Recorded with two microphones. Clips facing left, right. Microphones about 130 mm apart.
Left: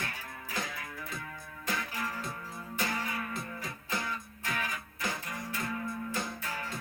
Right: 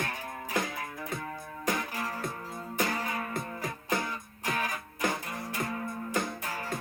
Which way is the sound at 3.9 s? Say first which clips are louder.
Right 5 dB; 55° right (ahead or behind).